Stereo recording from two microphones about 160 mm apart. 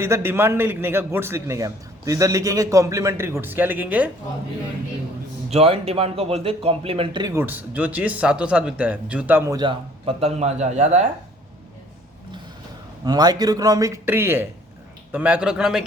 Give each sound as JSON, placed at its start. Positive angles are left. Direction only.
{"t": 0.0, "sound": "a man's voice", "side_deg": -15}
{"t": 5.5, "sound": "a man's voice", "side_deg": -40}
{"t": 9.6, "sound": "speech", "side_deg": -30}
{"t": 13.1, "sound": "a man's voice", "side_deg": -25}